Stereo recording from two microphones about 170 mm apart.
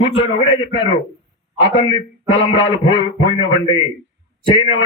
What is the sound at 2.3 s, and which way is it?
Speech, 25° left (ahead or behind).